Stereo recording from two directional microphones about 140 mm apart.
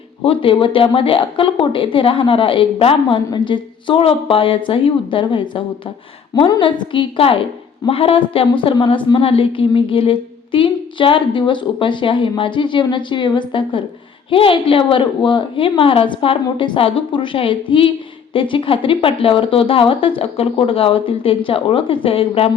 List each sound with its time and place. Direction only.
0.2 s a woman's voice: 40° left (ahead or behind)